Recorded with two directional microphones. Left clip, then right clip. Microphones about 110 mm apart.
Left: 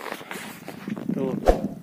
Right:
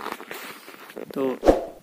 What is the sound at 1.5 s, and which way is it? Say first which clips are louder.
Speech: right 3 dB; centre (ahead or behind).